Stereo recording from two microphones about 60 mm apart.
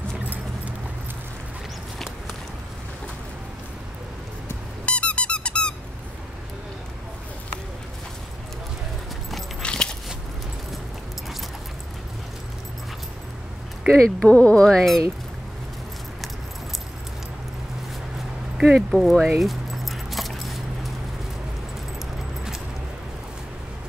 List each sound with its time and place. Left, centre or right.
4.8 s squeak: centre
9.6 s a sound: centre
13.9 s speech: centre
18.6 s speech: centre
19.4 s keys jangling: centre